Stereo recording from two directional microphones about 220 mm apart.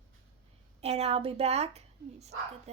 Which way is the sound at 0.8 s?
30° right (ahead or behind).